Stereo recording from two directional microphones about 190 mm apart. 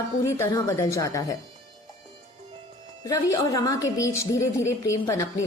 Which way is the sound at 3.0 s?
15° left (ahead or behind).